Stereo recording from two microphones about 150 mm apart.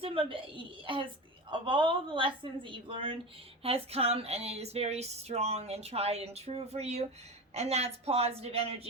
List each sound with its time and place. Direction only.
0.0 s a woman's voice: 35° right (ahead or behind)